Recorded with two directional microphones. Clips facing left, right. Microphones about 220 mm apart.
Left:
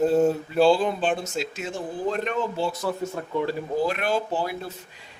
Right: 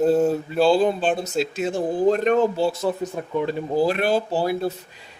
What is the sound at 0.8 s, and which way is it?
Speech, 35° right (ahead or behind).